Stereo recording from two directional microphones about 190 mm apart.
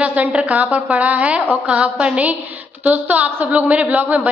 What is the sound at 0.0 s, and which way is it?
A woman's voice, 10° right (ahead or behind).